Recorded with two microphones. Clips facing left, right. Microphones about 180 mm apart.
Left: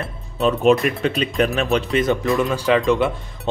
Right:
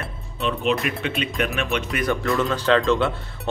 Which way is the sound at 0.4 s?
45° left (ahead or behind).